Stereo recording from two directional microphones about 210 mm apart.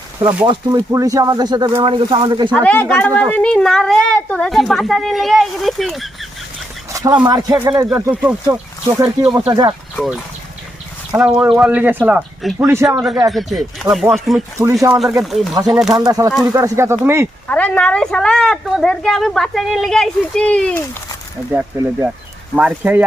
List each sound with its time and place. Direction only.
0.4 s speech: 15° right (ahead or behind)
2.5 s speech: 5° left (ahead or behind)
6.9 s speech: 15° right (ahead or behind)
7.9 s speech: 10° right (ahead or behind)
9.9 s speech: centre (ahead or behind)
11.3 s speech: 5° right (ahead or behind)
13.3 s speech: centre (ahead or behind)
14.9 s speech: centre (ahead or behind)
15.9 s speech: 15° right (ahead or behind)
17.5 s speech: 5° left (ahead or behind)
21.5 s speech: 5° right (ahead or behind)